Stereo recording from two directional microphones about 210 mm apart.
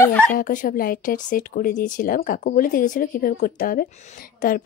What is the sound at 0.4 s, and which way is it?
Speech, 40° left (ahead or behind).